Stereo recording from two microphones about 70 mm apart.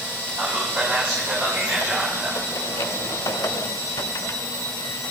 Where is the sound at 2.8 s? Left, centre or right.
Left.